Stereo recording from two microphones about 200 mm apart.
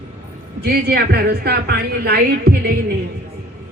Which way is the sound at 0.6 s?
50° right (ahead or behind).